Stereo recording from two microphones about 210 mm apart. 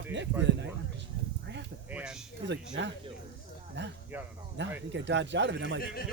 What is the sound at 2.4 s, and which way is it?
Speech, 55° right (ahead or behind).